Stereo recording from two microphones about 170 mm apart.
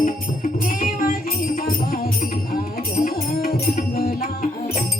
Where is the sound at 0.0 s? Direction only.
50° left (ahead or behind).